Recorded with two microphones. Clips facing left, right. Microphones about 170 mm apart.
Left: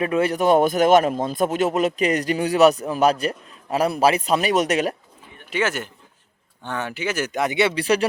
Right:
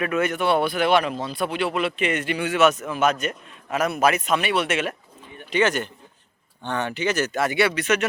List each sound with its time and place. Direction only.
0.0 s a man's voice: 30° left (ahead or behind)
5.5 s speech: 5° left (ahead or behind)
7.8 s a man's voice: 35° left (ahead or behind)